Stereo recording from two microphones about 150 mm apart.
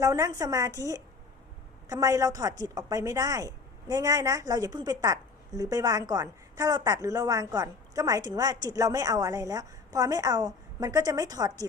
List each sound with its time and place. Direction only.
0.0 s a woman's voice: 25° right (ahead or behind)